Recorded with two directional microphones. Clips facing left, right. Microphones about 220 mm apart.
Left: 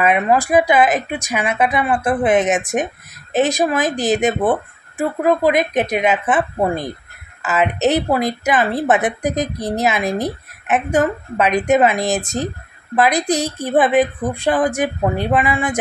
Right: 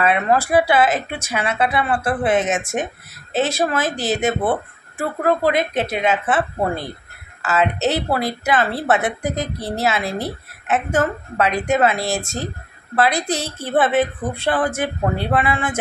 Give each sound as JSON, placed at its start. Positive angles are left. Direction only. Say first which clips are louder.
{"t": 0.0, "sound": "a woman's voice", "louder": "left 2 dB", "side_deg": 15}